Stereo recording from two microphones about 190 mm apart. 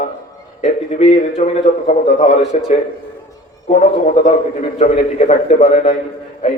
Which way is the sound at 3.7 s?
40° left (ahead or behind).